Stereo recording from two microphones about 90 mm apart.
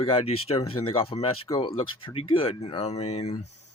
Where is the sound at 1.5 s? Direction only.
65° left (ahead or behind); by 2.8 s 90° left.